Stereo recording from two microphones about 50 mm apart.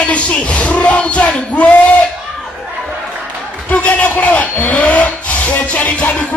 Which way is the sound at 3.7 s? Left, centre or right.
Left.